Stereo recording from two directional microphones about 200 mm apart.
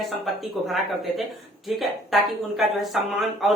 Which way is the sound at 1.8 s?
Centre (ahead or behind).